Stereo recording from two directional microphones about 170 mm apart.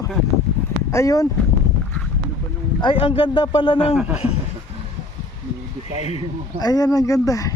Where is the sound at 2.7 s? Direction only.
30° left (ahead or behind).